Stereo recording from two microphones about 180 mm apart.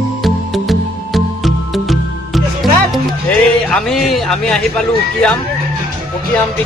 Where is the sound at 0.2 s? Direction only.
Centre (ahead or behind).